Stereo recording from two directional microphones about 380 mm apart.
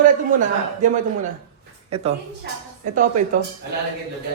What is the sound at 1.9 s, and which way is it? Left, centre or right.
Speech, centre.